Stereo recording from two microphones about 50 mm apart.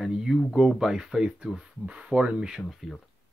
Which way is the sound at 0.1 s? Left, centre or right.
Centre.